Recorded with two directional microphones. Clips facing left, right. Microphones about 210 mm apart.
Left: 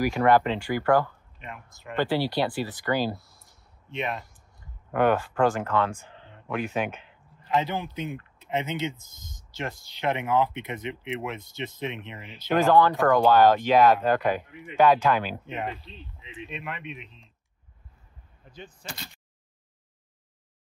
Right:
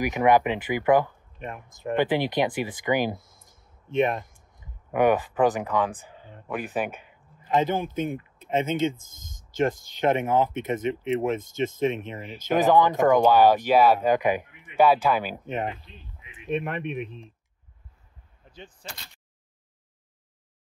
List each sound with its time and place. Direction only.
0.0 s speech: 15° right (ahead or behind)
1.4 s speech: 50° right (ahead or behind)
2.0 s speech: 20° right (ahead or behind)
3.9 s speech: 50° right (ahead or behind)
4.9 s speech: 15° right (ahead or behind)
7.6 s speech: 50° right (ahead or behind)
12.5 s speech: 15° right (ahead or behind)
15.4 s speech: 50° right (ahead or behind)
18.5 s speech: 30° right (ahead or behind)